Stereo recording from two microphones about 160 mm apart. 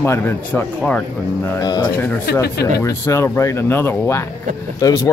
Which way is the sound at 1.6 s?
25° left (ahead or behind).